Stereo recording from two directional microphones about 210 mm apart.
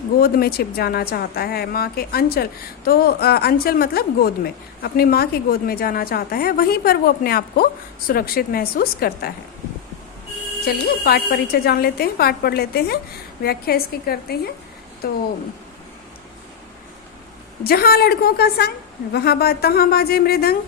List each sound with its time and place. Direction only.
0.2 s a woman's voice: 45° left (ahead or behind)
10.7 s a woman's voice: 50° left (ahead or behind)
17.6 s a woman's voice: 45° left (ahead or behind)